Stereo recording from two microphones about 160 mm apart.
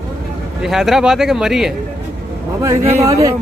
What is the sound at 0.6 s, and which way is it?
Speech, centre (ahead or behind).